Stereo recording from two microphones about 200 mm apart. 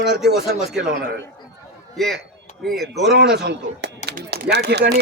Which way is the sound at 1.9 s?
Centre (ahead or behind).